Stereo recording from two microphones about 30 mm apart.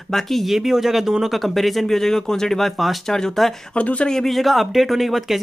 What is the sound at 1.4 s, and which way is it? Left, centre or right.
Speech, centre.